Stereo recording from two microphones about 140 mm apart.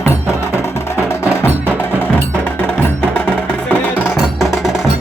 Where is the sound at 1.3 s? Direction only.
15° left (ahead or behind).